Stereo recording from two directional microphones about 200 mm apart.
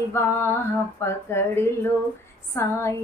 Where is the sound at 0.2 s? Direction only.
15° left (ahead or behind).